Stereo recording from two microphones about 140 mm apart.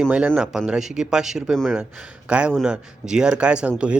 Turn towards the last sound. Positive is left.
turn(degrees=-5)  # may be behind; listen again after turning